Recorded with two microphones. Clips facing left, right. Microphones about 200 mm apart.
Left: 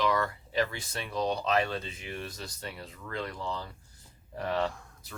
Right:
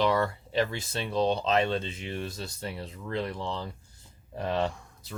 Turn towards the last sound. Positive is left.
turn(degrees=0)  # may be behind; listen again after turning